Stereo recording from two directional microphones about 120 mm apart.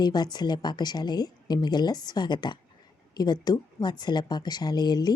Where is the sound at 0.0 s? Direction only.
35° left (ahead or behind).